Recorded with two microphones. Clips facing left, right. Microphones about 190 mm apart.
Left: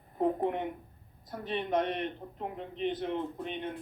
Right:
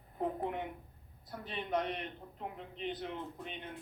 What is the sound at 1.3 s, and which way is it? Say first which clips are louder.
Speech: left 5 dB; 50° left (ahead or behind).